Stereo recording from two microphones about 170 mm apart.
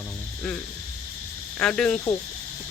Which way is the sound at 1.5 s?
5° left (ahead or behind).